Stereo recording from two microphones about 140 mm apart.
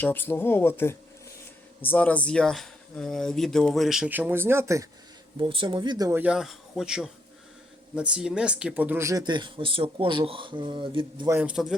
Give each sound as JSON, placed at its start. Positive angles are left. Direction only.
{"t": 0.0, "sound": "speech", "side_deg": 15}
{"t": 5.4, "sound": "speech", "side_deg": -35}
{"t": 6.1, "sound": "speech", "side_deg": -10}
{"t": 11.3, "sound": "a man's voice", "side_deg": -15}